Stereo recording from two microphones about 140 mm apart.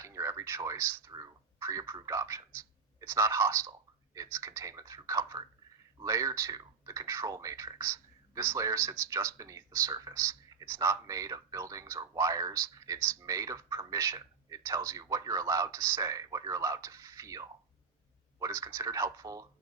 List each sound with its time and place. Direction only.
0.0 s speech: 20° right (ahead or behind)